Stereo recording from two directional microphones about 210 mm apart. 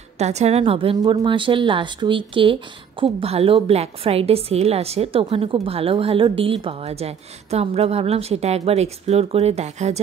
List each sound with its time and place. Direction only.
0.2 s a woman's voice: 30° right (ahead or behind)